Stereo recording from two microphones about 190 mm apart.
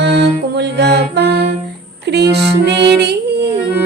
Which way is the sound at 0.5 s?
60° right (ahead or behind).